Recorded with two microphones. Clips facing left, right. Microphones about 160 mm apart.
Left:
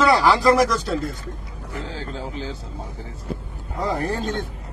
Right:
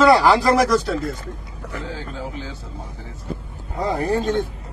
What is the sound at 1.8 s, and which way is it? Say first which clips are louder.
Speech: right 1 dB; 25° left (ahead or behind).